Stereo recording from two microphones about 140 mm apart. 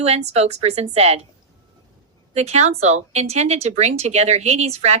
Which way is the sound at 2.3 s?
55° right (ahead or behind).